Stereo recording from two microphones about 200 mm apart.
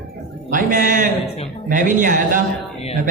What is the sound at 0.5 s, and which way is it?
Speech, 40° right (ahead or behind).